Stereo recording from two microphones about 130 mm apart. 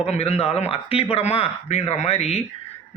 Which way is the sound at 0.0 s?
55° left (ahead or behind).